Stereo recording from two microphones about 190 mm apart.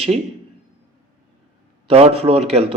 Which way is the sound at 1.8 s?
30° right (ahead or behind).